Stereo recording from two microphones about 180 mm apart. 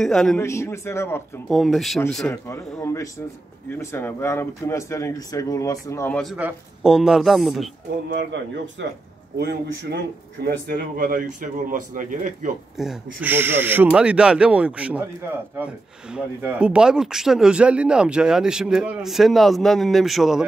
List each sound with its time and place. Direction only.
0.0 s speech: 5° left (ahead or behind)
0.4 s speech: 15° left (ahead or behind)
1.5 s speech: centre (ahead or behind); by 6.1 s 15° left (ahead or behind)
6.3 s speech: 5° right (ahead or behind)
8.1 s speech: 75° right (ahead or behind)
9.4 s speech: 65° right (ahead or behind); by 12.3 s 45° right (ahead or behind)
12.7 s speech: 5° right (ahead or behind)
16.1 s speech: 5° right (ahead or behind)